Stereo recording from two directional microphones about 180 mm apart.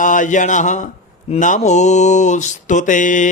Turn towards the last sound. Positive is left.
turn(degrees=45)  # may be behind; listen again after turning